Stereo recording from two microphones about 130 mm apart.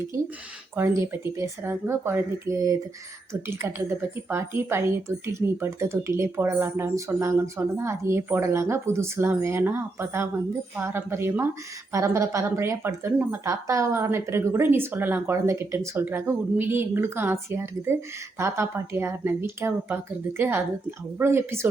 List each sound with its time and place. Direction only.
0.8 s speech: 20° right (ahead or behind)